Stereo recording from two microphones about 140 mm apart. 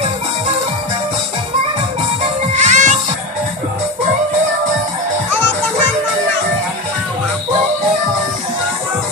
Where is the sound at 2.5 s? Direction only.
60° right (ahead or behind).